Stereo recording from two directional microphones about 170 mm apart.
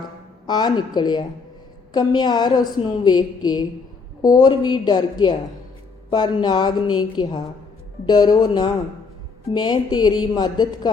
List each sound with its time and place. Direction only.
0.4 s a woman's voice: 25° left (ahead or behind)